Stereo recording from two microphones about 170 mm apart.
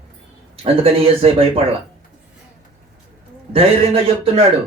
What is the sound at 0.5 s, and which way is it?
Speech, 35° right (ahead or behind).